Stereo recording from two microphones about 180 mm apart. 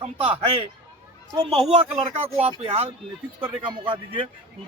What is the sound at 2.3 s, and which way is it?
A man's voice, 30° right (ahead or behind).